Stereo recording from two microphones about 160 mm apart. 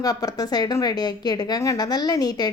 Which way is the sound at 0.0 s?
25° left (ahead or behind).